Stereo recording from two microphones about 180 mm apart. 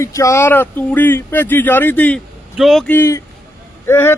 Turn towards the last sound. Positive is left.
turn(degrees=15)  # may be behind; listen again after turning